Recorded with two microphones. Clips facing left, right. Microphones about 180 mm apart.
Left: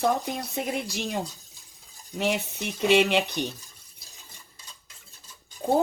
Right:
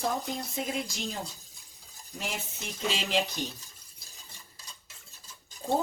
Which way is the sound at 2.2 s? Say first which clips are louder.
Left 11 dB; 65° left (ahead or behind).